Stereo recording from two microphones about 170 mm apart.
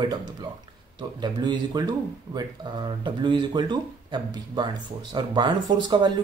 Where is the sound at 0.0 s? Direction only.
25° right (ahead or behind).